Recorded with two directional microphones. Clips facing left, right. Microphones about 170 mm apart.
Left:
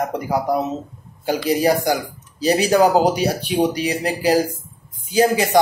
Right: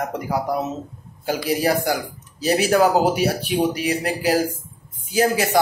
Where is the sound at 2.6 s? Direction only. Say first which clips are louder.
Left 2 dB; 15° left (ahead or behind).